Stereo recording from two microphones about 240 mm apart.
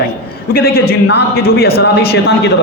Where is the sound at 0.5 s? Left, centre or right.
Left.